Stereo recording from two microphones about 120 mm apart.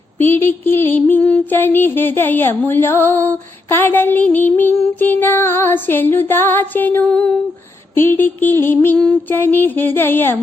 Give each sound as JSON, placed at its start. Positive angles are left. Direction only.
{"t": 0.2, "sound": "music", "side_deg": 15}
{"t": 7.9, "sound": "a sound", "side_deg": 20}
{"t": 9.0, "sound": "music", "side_deg": 10}